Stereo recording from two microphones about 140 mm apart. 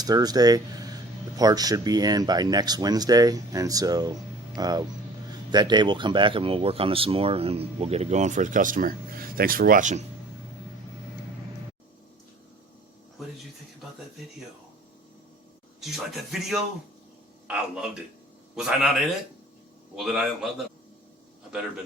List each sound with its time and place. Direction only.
0.0 s speech: 30° right (ahead or behind); by 10.0 s 65° right (ahead or behind)
15.8 s speech: centre (ahead or behind)
18.5 s speech: 5° right (ahead or behind)